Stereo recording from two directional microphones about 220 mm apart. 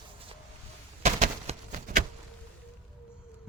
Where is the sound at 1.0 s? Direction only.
30° right (ahead or behind).